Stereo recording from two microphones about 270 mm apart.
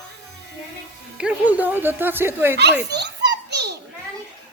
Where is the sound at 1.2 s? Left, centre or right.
Centre.